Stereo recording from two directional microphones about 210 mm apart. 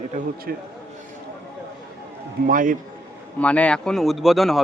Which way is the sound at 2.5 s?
40° right (ahead or behind).